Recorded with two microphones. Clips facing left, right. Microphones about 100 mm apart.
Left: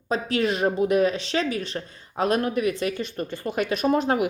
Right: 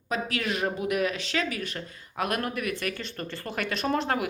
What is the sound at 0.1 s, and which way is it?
Speech, 25° left (ahead or behind).